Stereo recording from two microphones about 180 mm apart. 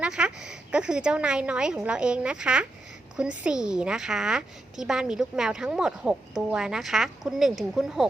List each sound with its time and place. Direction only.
0.0 s a woman's voice: 5° right (ahead or behind)